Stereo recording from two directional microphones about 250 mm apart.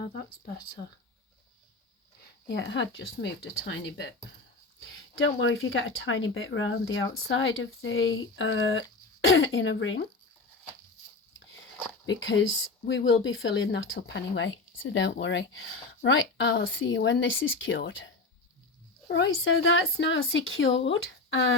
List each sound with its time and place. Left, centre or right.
2.5 s speech: left
12.0 s speech: left